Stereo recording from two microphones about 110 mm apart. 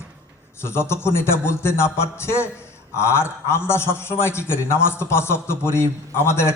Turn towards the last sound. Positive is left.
turn(degrees=25)  # may be behind; listen again after turning